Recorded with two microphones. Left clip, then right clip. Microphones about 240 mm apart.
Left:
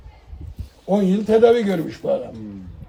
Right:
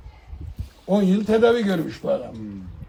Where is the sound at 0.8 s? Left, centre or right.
Centre.